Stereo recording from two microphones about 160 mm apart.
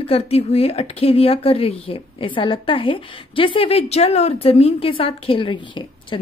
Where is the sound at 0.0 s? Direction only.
40° left (ahead or behind).